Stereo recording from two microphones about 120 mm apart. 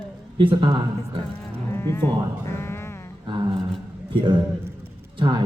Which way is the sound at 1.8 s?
20° left (ahead or behind).